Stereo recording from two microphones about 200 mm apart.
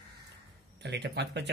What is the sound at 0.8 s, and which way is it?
Speech, 55° right (ahead or behind).